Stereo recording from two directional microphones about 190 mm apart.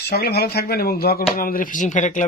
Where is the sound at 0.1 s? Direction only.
55° left (ahead or behind).